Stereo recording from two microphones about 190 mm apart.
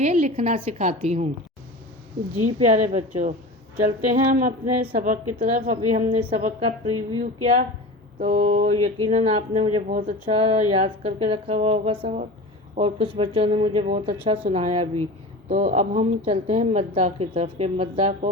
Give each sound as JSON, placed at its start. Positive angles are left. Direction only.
{"t": 0.0, "sound": "speech", "side_deg": -35}
{"t": 2.7, "sound": "speech", "side_deg": -40}
{"t": 3.8, "sound": "a sound", "side_deg": -45}
{"t": 5.7, "sound": "speech", "side_deg": -40}